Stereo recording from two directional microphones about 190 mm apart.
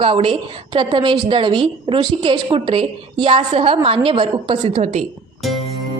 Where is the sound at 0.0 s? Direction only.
30° right (ahead or behind).